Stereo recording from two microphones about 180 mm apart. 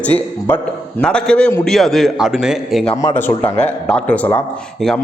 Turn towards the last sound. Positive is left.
turn(degrees=5)  # may be behind; listen again after turning